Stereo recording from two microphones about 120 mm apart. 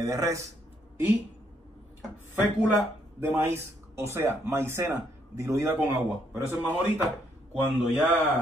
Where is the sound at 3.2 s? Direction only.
20° right (ahead or behind).